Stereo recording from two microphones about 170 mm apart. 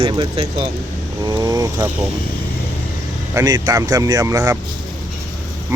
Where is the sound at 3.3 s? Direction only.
20° right (ahead or behind).